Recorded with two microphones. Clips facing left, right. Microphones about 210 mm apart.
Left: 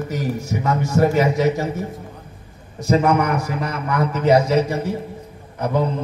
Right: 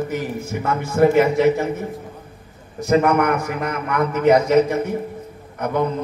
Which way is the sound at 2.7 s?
55° right (ahead or behind).